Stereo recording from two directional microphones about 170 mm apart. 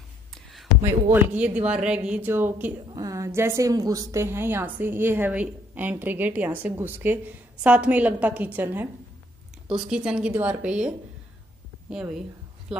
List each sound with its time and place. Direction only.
0.3 s a sound: centre (ahead or behind)
1.1 s a woman's voice: 10° right (ahead or behind)
11.9 s speech: 5° right (ahead or behind)